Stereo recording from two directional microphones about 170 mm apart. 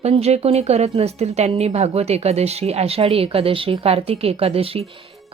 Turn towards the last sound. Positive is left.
turn(degrees=-35)  # may be behind; listen again after turning